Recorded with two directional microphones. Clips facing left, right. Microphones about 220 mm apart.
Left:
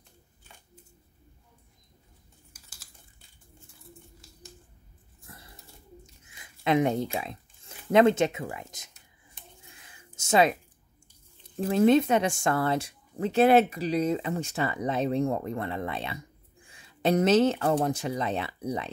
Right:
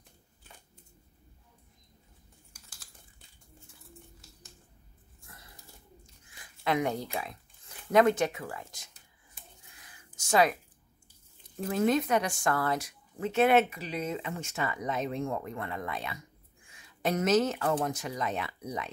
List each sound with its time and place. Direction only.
6.2 s speech: 20° left (ahead or behind)
9.8 s a sound: 25° left (ahead or behind)
11.7 s a woman's voice: 25° left (ahead or behind)